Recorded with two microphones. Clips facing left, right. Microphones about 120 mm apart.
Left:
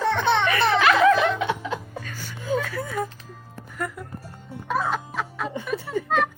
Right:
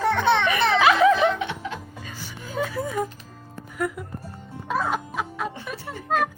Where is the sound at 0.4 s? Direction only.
10° right (ahead or behind).